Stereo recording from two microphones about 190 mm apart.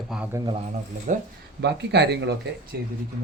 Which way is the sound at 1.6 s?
60° right (ahead or behind).